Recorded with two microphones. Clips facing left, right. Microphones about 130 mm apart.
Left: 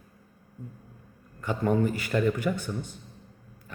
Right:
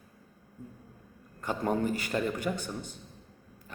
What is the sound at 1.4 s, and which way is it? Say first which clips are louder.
Speech: left 4 dB; 40° right (ahead or behind).